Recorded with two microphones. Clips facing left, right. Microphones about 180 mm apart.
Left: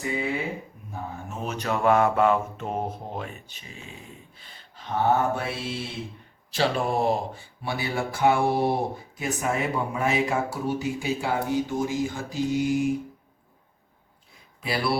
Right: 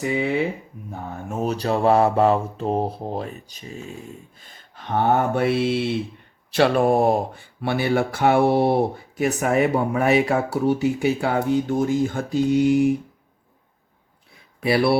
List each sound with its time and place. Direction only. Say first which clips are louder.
1.3 s mantra: right 7 dB; 40° right (ahead or behind); by 5.8 s 65° right (ahead or behind)
6.5 s speech: right 7 dB; 60° right (ahead or behind)
14.6 s speech: right 8 dB; 65° right (ahead or behind)